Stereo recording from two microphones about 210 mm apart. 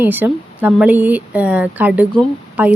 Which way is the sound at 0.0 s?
10° right (ahead or behind).